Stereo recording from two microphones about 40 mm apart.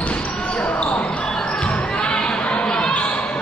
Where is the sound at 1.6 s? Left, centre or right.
Left.